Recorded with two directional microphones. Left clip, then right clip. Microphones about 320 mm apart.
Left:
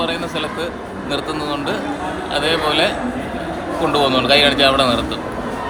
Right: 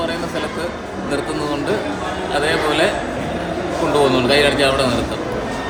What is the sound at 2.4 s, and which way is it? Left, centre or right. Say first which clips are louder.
Speech: left 1 dB; centre.